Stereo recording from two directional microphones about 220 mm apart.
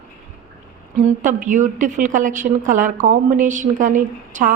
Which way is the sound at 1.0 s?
35° right (ahead or behind).